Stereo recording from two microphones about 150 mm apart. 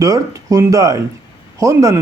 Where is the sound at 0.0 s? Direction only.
20° right (ahead or behind).